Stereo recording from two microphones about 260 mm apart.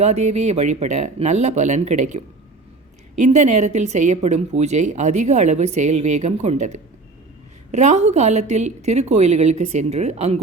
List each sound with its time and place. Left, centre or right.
0.0 s speech: right